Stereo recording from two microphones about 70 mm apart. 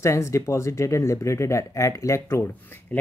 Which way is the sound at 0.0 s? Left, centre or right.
Left.